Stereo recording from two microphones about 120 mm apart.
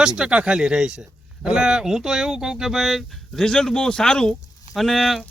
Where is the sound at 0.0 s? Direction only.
5° right (ahead or behind).